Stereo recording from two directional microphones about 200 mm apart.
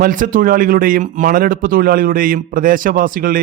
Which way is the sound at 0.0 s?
45° right (ahead or behind).